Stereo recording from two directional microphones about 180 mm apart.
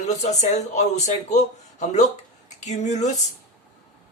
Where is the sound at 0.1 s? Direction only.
40° left (ahead or behind).